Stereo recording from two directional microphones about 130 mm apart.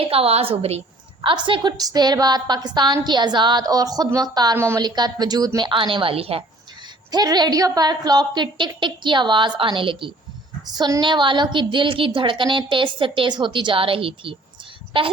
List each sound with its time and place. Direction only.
0.0 s a woman's voice: 50° right (ahead or behind)
1.2 s a woman's voice: 40° right (ahead or behind); by 4.8 s 20° right (ahead or behind)
4.8 s a woman's voice: 35° right (ahead or behind); by 6.4 s 50° right (ahead or behind)
7.1 s a woman's voice: 30° right (ahead or behind)
10.7 s a woman's voice: 30° right (ahead or behind)